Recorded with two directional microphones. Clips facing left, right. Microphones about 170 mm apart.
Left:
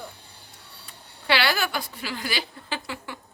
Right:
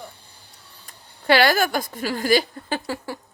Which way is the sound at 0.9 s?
45° right (ahead or behind).